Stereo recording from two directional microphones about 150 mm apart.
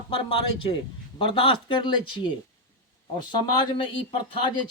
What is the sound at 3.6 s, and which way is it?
Speech, 35° left (ahead or behind).